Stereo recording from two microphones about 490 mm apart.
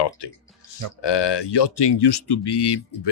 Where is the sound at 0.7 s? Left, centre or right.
Left.